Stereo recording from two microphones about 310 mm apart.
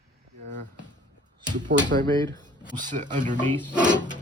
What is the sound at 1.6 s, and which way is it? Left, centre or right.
A man's voice, right.